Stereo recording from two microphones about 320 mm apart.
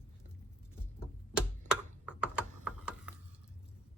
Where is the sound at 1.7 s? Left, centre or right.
Centre.